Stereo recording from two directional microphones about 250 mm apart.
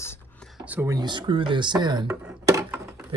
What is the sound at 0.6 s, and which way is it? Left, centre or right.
Speech, centre.